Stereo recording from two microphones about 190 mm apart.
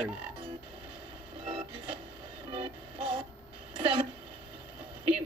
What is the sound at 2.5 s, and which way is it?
Music, 25° right (ahead or behind).